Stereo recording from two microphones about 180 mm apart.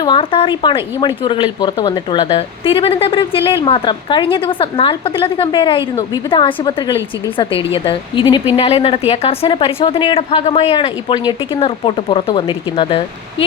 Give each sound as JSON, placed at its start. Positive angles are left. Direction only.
{"t": 0.0, "sound": "a woman's voice", "side_deg": 30}